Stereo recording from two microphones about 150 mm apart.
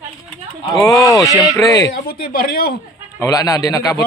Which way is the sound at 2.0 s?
90° left.